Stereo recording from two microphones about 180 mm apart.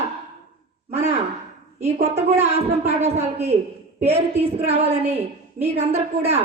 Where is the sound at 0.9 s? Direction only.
35° right (ahead or behind).